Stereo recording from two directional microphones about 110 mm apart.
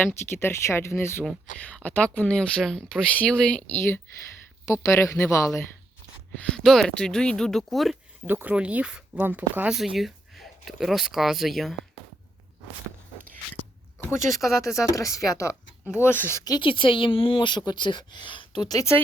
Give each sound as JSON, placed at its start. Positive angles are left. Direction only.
{"t": 0.0, "sound": "speech", "side_deg": 20}
{"t": 1.6, "sound": "speech", "side_deg": 15}
{"t": 3.8, "sound": "speech", "side_deg": 20}
{"t": 6.4, "sound": "speech", "side_deg": 5}
{"t": 8.3, "sound": "speech", "side_deg": -15}
{"t": 9.7, "sound": "speech", "side_deg": 0}
{"t": 14.8, "sound": "speech", "side_deg": 30}
{"t": 16.4, "sound": "speech", "side_deg": 35}
{"t": 16.6, "sound": "a woman's voice", "side_deg": 50}